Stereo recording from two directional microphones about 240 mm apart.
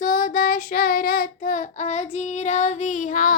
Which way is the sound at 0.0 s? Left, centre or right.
Left.